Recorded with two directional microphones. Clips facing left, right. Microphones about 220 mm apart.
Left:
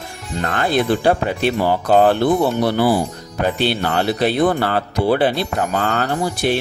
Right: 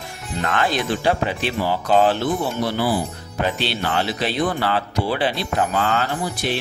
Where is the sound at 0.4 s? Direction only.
45° left (ahead or behind).